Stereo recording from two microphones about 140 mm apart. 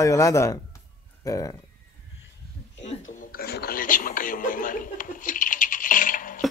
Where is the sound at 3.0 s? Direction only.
70° left (ahead or behind).